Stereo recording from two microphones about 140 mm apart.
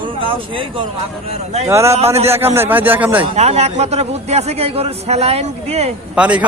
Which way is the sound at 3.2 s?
50° right (ahead or behind).